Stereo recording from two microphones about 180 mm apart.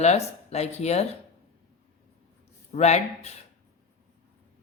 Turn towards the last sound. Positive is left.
turn(degrees=40)  # may be behind; listen again after turning